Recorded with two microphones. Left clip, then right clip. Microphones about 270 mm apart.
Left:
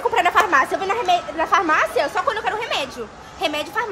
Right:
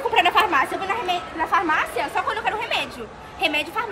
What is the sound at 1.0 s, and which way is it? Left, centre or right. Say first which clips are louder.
A woman's voice: left 5 dB; centre.